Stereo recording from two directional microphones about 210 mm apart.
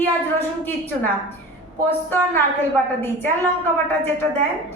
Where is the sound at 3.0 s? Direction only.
10° left (ahead or behind).